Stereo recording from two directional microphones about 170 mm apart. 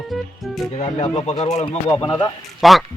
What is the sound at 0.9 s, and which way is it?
Speech, 35° left (ahead or behind).